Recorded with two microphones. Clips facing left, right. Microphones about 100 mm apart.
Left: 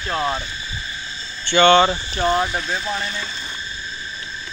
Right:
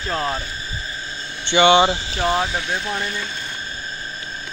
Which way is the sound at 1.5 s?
15° right (ahead or behind).